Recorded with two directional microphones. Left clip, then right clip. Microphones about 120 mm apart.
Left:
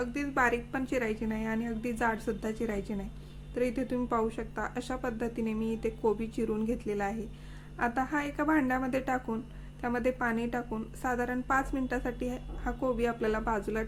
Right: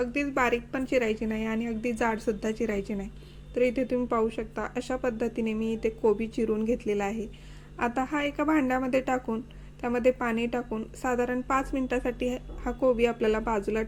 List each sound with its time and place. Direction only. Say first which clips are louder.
0.0 s a woman's voice: right 3 dB; 20° right (ahead or behind)